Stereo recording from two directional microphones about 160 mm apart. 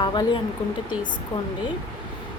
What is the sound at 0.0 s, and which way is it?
Speech, 30° left (ahead or behind).